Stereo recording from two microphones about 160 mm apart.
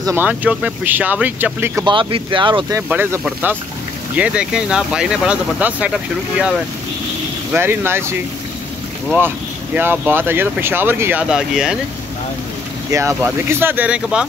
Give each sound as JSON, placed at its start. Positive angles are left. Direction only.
{"t": 0.0, "sound": "speech", "side_deg": -15}
{"t": 1.9, "sound": "speech", "side_deg": -30}
{"t": 2.9, "sound": "speech", "side_deg": -10}
{"t": 7.5, "sound": "speech", "side_deg": -15}
{"t": 9.8, "sound": "speech", "side_deg": -10}
{"t": 12.9, "sound": "speech", "side_deg": -15}